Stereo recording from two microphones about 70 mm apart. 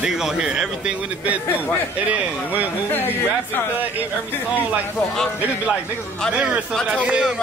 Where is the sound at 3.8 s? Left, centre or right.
Right.